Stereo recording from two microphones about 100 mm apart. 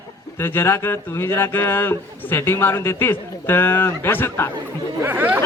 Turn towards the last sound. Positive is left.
turn(degrees=-20)  # may be behind; listen again after turning